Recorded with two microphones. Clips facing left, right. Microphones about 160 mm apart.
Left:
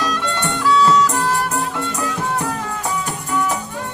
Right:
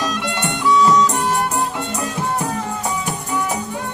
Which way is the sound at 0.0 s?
15° right (ahead or behind).